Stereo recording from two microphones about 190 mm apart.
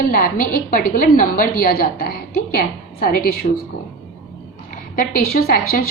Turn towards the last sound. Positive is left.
turn(degrees=50)  # may be behind; listen again after turning